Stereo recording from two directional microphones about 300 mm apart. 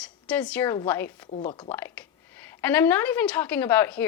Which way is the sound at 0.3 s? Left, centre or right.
Centre.